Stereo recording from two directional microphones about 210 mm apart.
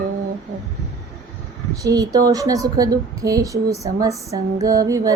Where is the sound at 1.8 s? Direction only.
15° right (ahead or behind).